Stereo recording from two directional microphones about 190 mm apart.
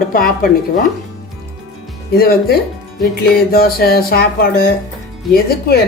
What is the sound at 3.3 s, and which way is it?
Music, 55° left (ahead or behind).